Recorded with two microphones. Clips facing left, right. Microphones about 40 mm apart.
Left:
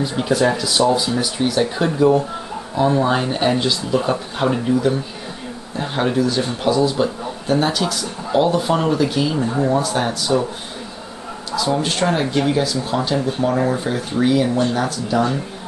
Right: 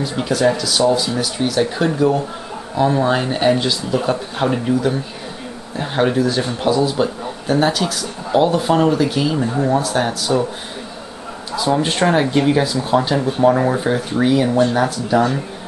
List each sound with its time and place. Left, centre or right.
0.0 s speech: centre
11.5 s speech: centre